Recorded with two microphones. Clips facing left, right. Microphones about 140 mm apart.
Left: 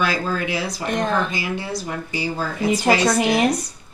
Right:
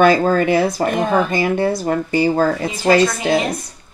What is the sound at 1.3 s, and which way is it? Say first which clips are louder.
Speech: right 9 dB; 55° right (ahead or behind).